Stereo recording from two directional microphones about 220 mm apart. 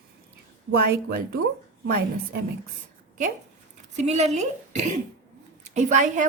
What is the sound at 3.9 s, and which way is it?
A woman's voice, 30° right (ahead or behind).